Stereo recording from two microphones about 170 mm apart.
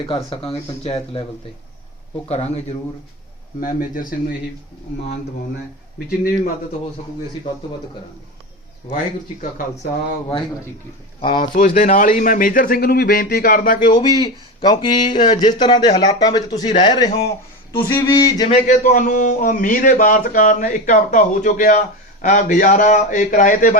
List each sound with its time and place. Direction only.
0.4 s speech: 35° left (ahead or behind)
2.3 s speech: 40° left (ahead or behind)
3.6 s a man's voice: 55° left (ahead or behind)
6.1 s a man's voice: 55° left (ahead or behind)
11.2 s speech: 30° left (ahead or behind)
11.5 s a man's voice: 45° left (ahead or behind)
14.0 s speech: 25° left (ahead or behind)
18.4 s a man's voice: 45° left (ahead or behind)